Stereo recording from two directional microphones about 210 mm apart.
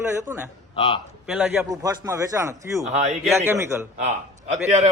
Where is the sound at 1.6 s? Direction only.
15° right (ahead or behind).